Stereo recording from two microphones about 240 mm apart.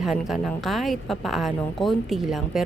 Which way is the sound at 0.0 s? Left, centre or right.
Centre.